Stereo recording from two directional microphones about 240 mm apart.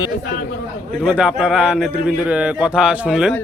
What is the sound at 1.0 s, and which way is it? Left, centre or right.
A man's voice, centre.